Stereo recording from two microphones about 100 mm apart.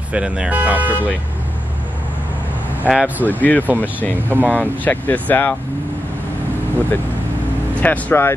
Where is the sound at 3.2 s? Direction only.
15° left (ahead or behind).